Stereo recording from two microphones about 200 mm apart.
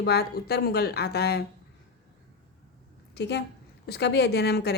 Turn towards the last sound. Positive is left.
turn(degrees=55)  # may be behind; listen again after turning